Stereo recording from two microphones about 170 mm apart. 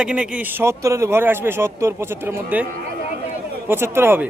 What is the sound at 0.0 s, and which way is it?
Speech, 5° right (ahead or behind).